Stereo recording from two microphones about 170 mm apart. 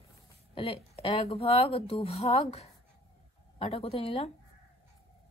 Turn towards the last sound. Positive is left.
turn(degrees=35)  # may be behind; listen again after turning